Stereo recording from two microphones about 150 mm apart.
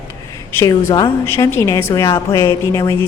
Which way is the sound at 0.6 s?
20° left (ahead or behind).